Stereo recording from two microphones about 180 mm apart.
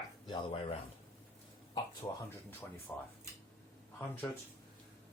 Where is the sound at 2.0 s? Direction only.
20° left (ahead or behind).